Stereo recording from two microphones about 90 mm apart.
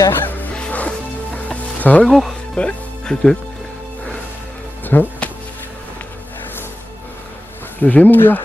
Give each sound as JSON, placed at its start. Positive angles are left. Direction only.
{"t": 0.1, "sound": "music", "side_deg": 20}
{"t": 2.0, "sound": "speech", "side_deg": 0}
{"t": 2.5, "sound": "music", "side_deg": 10}
{"t": 4.8, "sound": "music", "side_deg": 20}
{"t": 7.8, "sound": "speech", "side_deg": 15}